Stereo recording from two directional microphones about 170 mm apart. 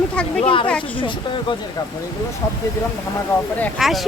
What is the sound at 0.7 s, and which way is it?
Speech, 5° left (ahead or behind).